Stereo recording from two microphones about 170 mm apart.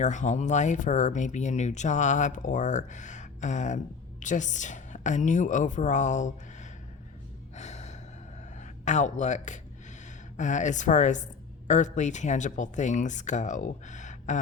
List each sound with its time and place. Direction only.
0.0 s a woman's voice: 45° left (ahead or behind)
7.5 s gasp: 40° left (ahead or behind)
8.5 s speech: 45° left (ahead or behind)